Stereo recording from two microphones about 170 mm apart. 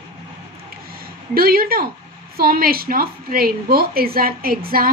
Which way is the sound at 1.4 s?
60° right (ahead or behind).